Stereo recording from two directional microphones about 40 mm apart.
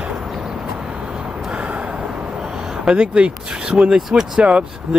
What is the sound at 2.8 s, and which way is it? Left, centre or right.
Speech, right.